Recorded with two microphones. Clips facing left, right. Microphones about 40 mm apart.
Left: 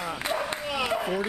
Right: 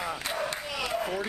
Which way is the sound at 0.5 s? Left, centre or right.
Centre.